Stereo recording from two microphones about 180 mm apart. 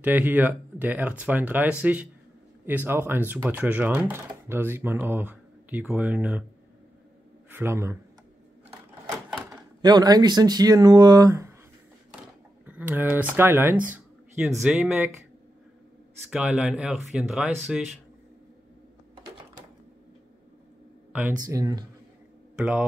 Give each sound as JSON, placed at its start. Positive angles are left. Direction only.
{"t": 0.0, "sound": "speech", "side_deg": -10}
{"t": 7.4, "sound": "a man's voice", "side_deg": -15}
{"t": 9.8, "sound": "speech", "side_deg": -20}
{"t": 12.6, "sound": "speech", "side_deg": -10}
{"t": 16.3, "sound": "speech", "side_deg": -5}
{"t": 21.4, "sound": "speech", "side_deg": -20}